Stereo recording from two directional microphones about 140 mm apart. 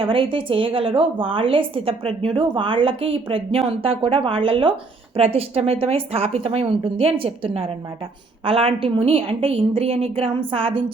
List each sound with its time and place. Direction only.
0.0 s a woman's voice: 40° right (ahead or behind)